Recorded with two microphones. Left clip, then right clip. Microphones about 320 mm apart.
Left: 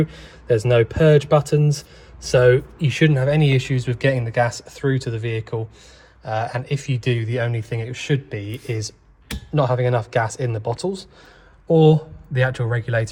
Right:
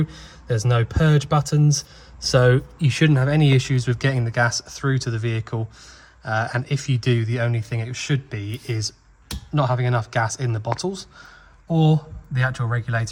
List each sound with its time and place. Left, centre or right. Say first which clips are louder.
0.1 s speech: left 8 dB; right
11.7 s speech: left 8 dB; centre